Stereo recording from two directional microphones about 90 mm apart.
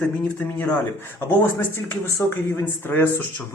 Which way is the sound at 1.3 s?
25° left (ahead or behind).